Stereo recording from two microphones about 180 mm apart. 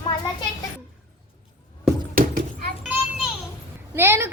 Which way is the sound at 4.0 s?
15° right (ahead or behind).